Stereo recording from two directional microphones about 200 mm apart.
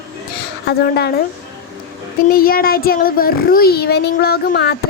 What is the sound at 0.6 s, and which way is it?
Speech, 55° left (ahead or behind).